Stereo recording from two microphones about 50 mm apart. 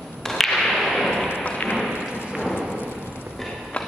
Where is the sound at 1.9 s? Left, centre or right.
Right.